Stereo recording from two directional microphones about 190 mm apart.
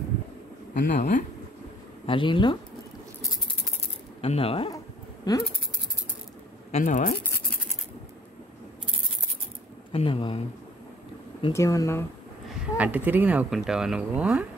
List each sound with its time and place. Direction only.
0.8 s speech: 40° left (ahead or behind)
2.0 s speech: 25° left (ahead or behind)
4.2 s speech: 30° left (ahead or behind)
6.7 s speech: 40° left (ahead or behind)
9.9 s speech: 30° left (ahead or behind)
11.5 s speech: 15° left (ahead or behind)
12.7 s speech: 10° right (ahead or behind)